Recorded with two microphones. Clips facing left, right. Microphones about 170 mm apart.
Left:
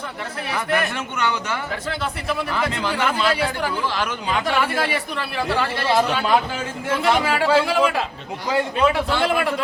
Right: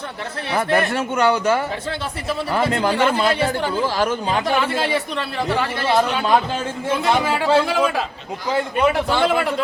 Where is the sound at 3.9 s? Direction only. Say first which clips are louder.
Right 5 dB; 40° right (ahead or behind).